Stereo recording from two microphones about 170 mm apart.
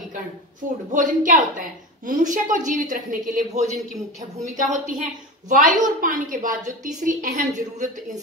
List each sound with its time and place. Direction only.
0.9 s a woman's voice: 50° right (ahead or behind)